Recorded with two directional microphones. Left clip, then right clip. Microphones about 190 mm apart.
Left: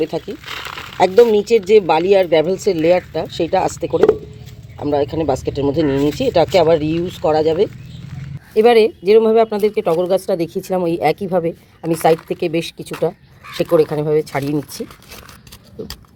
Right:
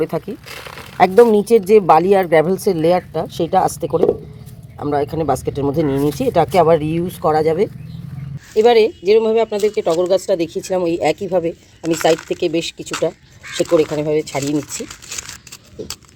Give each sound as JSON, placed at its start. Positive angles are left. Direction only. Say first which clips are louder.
{"t": 0.0, "sound": "speech", "louder": "even", "side_deg": -10}
{"t": 12.4, "sound": "speech", "louder": "right 1 dB", "side_deg": 40}
{"t": 12.8, "sound": "speech", "louder": "even", "side_deg": 10}